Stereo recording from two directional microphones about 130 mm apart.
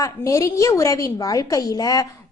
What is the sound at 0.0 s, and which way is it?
A woman's voice, 25° left (ahead or behind).